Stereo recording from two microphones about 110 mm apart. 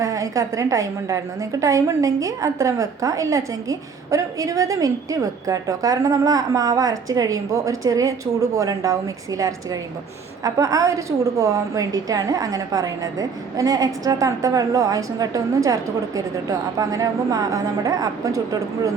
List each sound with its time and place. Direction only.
0.0 s a woman's voice: 30° right (ahead or behind)